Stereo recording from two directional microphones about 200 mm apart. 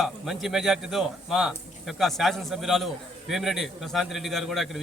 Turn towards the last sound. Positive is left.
turn(degrees=0)  # may be behind; listen again after turning